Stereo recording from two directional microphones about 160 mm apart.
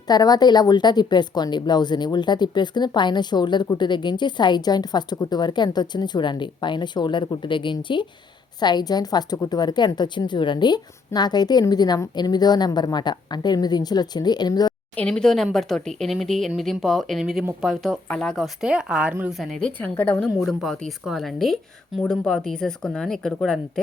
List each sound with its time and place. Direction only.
0.1 s a woman's voice: 25° left (ahead or behind)
14.9 s speech: 5° left (ahead or behind)